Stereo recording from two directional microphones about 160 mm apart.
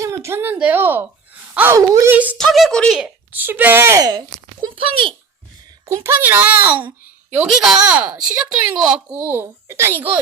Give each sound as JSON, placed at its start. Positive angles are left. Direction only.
{"t": 0.0, "sound": "a woman's voice", "side_deg": -20}
{"t": 3.0, "sound": "speech", "side_deg": -10}
{"t": 4.6, "sound": "a child's voice", "side_deg": -35}
{"t": 5.9, "sound": "speech", "side_deg": -15}